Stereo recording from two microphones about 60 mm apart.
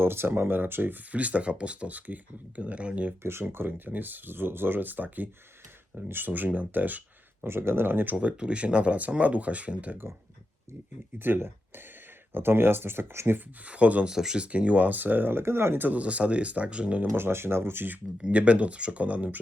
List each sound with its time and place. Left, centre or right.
0.0 s speech: right
3.5 s speech: right
7.4 s speech: right
8.1 s speech: centre
11.2 s speech: right
13.7 s speech: right
14.1 s speech: centre
14.4 s speech: right
15.9 s speech: right
17.0 s speech: right
18.2 s speech: right